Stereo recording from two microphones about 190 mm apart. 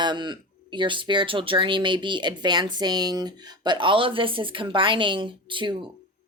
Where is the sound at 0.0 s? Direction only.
25° right (ahead or behind).